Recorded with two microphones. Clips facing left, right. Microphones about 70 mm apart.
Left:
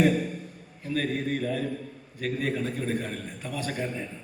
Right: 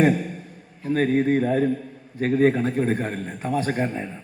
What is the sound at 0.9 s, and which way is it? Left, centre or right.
A man's voice, right.